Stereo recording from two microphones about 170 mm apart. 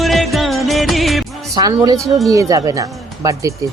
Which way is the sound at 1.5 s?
25° right (ahead or behind).